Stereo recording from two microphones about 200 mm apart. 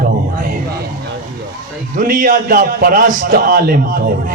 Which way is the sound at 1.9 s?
40° right (ahead or behind).